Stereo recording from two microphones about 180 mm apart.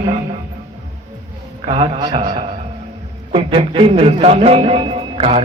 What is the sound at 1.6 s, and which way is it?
A man's voice, 30° right (ahead or behind).